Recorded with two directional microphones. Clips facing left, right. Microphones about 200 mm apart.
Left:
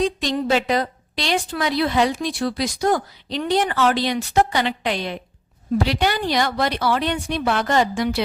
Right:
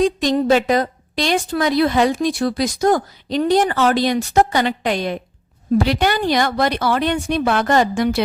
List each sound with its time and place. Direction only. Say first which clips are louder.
0.0 s a woman's voice: right 5 dB; 45° right (ahead or behind)